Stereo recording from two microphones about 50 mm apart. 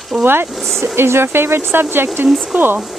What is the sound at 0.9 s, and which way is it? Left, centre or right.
Speech, right.